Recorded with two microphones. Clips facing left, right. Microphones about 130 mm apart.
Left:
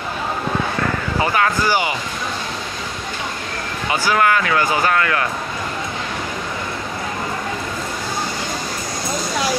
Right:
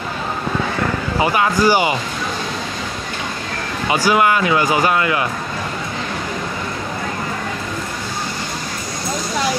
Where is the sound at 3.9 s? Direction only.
15° right (ahead or behind).